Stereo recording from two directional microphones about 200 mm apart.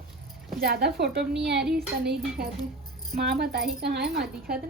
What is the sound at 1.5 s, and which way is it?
Speech, 5° right (ahead or behind).